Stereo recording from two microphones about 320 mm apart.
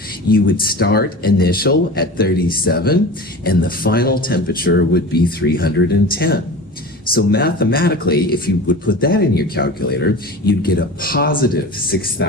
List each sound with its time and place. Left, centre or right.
0.3 s speech: left